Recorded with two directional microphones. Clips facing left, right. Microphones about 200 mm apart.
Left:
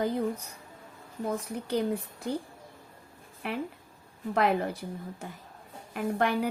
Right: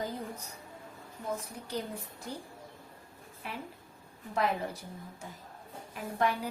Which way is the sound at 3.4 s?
65° left (ahead or behind).